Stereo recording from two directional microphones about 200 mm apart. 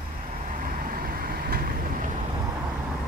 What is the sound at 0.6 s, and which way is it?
Vehicle, 45° right (ahead or behind).